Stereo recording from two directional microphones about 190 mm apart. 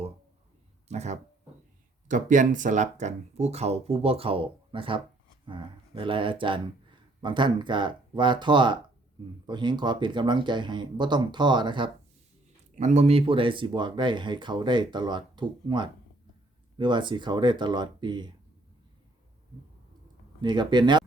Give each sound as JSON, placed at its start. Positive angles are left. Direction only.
{"t": 0.9, "sound": "speech", "side_deg": -35}
{"t": 12.8, "sound": "speech", "side_deg": -35}
{"t": 20.4, "sound": "speech", "side_deg": -25}